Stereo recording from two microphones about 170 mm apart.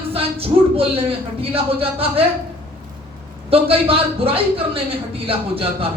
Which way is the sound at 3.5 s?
35° right (ahead or behind).